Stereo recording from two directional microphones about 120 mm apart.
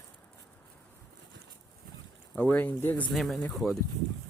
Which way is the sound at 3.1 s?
Centre (ahead or behind).